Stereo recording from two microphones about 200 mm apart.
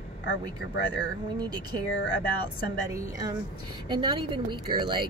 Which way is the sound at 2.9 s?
15° right (ahead or behind).